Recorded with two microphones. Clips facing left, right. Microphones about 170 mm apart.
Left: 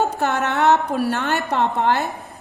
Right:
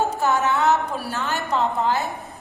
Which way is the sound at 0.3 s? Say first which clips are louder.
Left 4 dB; 65° left (ahead or behind).